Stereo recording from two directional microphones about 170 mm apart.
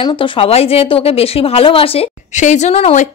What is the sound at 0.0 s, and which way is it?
Speech, 30° left (ahead or behind).